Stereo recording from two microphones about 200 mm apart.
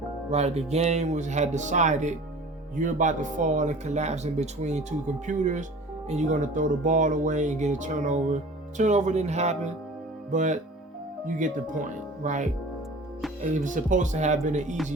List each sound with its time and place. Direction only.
0.3 s speech: 35° right (ahead or behind)